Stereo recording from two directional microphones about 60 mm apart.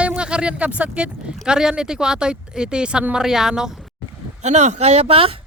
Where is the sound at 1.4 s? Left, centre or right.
Centre.